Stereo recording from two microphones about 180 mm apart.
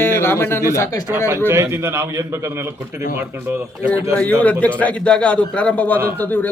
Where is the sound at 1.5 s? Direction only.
15° right (ahead or behind).